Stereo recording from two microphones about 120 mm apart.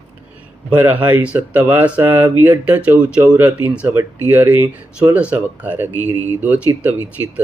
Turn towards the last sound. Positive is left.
turn(degrees=-15)  # may be behind; listen again after turning